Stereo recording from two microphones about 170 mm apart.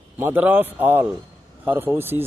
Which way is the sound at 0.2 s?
10° right (ahead or behind).